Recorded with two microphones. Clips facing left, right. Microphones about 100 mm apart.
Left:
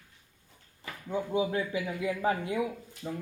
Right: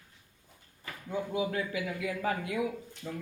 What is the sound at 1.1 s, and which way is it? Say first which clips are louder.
A man's voice: left 3 dB; 25° left (ahead or behind).